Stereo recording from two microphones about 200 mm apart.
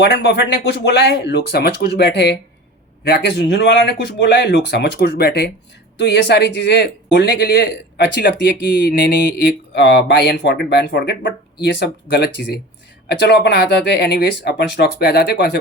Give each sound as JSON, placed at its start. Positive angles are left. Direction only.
{"t": 0.0, "sound": "speech", "side_deg": 55}